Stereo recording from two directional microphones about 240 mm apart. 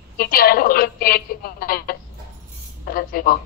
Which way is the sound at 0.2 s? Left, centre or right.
Left.